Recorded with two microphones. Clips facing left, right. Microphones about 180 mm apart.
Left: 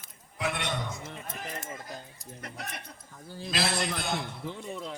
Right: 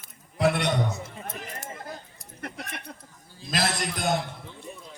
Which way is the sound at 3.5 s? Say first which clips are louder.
Right 2 dB; 45° right (ahead or behind).